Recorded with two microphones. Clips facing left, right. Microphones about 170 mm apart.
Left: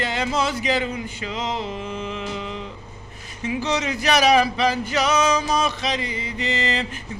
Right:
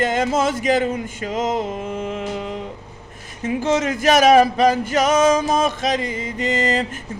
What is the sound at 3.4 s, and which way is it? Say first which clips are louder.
Speech: right 5 dB; 50° right (ahead or behind).